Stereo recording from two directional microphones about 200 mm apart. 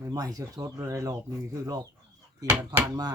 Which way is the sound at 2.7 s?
20° right (ahead or behind).